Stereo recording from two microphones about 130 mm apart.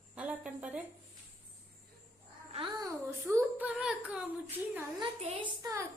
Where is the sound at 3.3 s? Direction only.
10° right (ahead or behind).